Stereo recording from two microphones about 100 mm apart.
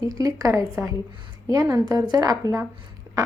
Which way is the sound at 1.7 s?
45° right (ahead or behind).